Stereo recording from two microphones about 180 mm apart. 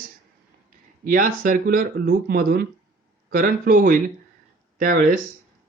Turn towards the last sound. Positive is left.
turn(degrees=-50)  # may be behind; listen again after turning